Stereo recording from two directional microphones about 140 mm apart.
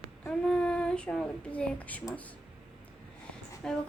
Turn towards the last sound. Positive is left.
turn(degrees=5)  # may be behind; listen again after turning